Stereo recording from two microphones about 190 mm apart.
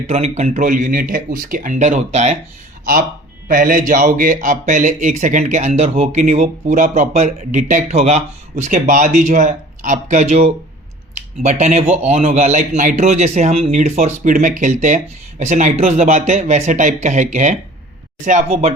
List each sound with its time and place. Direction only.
0.1 s speech: 35° right (ahead or behind)
3.5 s speech: 45° right (ahead or behind)